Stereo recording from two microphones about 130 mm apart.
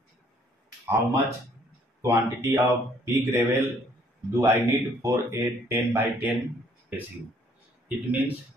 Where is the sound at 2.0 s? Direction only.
20° right (ahead or behind).